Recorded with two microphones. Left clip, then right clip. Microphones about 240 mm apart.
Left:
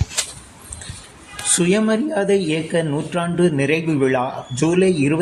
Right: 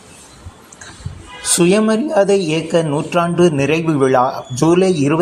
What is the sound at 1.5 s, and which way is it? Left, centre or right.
Speech, centre.